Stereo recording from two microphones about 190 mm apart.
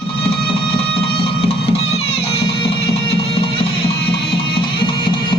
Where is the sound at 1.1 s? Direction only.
30° left (ahead or behind).